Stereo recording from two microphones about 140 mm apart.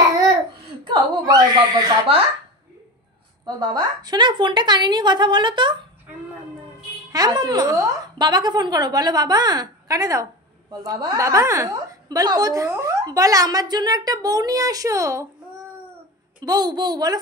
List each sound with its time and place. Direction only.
0.8 s speech: 25° right (ahead or behind)
3.4 s a woman's voice: 30° right (ahead or behind)
7.1 s a woman's voice: 25° right (ahead or behind)
16.3 s a woman's voice: 30° right (ahead or behind)